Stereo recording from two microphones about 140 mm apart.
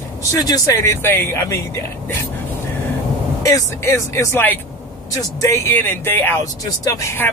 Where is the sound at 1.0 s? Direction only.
15° left (ahead or behind).